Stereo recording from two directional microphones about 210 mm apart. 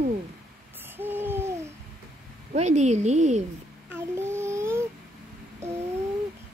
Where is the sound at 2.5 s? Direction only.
35° right (ahead or behind).